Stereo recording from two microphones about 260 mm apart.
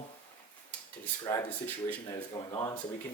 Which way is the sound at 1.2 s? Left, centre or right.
Centre.